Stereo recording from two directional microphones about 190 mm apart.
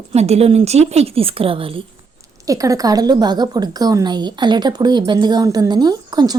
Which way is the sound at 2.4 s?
15° right (ahead or behind).